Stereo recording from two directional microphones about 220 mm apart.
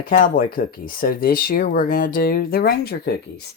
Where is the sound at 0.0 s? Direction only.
40° left (ahead or behind).